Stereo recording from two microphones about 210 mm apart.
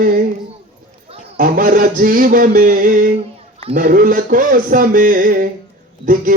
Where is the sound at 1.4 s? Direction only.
40° right (ahead or behind).